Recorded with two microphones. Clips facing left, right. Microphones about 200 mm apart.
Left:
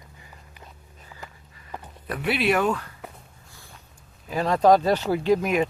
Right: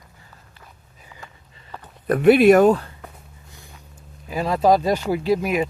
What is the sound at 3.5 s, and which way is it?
Vehicle, 20° right (ahead or behind).